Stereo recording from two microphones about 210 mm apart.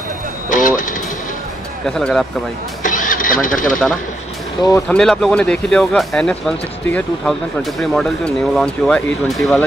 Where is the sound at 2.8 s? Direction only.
40° left (ahead or behind).